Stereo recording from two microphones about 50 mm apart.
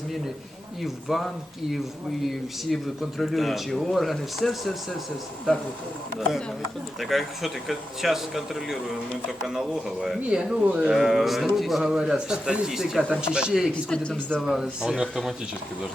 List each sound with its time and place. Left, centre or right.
0.8 s speech: centre
7.0 s speech: centre
10.6 s speech: right
10.8 s speech: centre
11.8 s speech: centre
13.9 s speech: centre
14.4 s speech: centre